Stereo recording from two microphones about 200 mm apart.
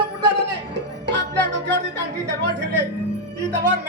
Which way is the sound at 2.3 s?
60° right (ahead or behind).